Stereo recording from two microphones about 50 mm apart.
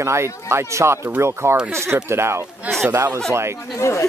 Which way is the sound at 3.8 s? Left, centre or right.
Left.